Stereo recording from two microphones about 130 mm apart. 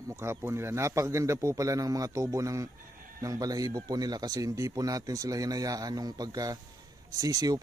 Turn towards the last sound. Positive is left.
turn(degrees=-30)  # may be behind; listen again after turning